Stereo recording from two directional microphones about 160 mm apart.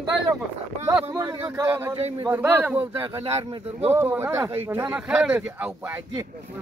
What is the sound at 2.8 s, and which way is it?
Speech, 40° right (ahead or behind).